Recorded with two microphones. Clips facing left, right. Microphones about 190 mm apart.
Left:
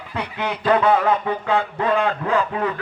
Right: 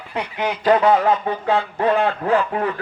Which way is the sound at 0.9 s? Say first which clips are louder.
Right 1 dB; 35° right (ahead or behind).